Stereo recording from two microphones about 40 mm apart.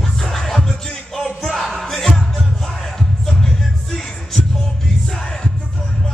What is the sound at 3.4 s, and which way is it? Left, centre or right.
Music, centre.